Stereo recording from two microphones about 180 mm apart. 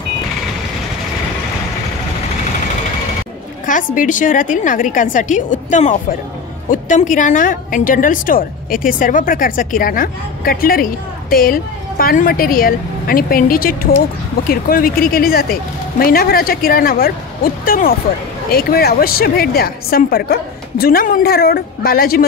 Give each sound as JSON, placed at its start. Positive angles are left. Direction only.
{"t": 3.6, "sound": "a woman's voice", "side_deg": 45}